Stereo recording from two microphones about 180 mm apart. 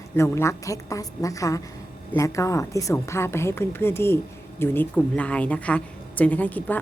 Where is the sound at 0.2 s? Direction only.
15° left (ahead or behind).